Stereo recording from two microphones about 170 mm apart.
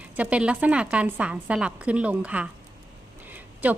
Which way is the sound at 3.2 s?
10° right (ahead or behind).